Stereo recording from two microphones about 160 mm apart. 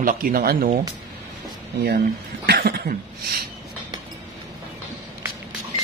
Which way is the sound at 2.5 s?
75° right (ahead or behind).